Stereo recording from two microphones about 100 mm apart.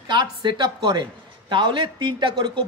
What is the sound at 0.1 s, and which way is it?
A man's voice, 50° right (ahead or behind).